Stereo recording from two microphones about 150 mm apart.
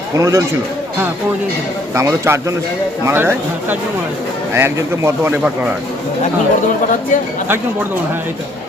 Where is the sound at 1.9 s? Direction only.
20° right (ahead or behind).